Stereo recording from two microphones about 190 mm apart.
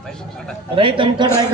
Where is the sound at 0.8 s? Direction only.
25° right (ahead or behind).